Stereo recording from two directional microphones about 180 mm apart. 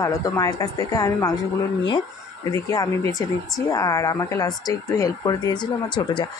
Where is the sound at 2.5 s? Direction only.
20° left (ahead or behind).